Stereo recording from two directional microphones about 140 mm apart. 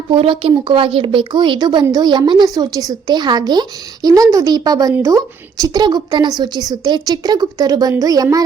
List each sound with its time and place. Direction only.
0.1 s a woman's voice: 40° right (ahead or behind)